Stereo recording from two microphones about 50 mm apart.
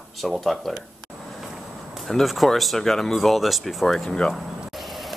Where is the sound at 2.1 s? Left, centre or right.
Centre.